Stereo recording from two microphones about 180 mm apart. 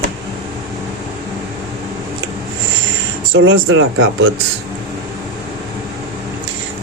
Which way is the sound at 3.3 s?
90° right.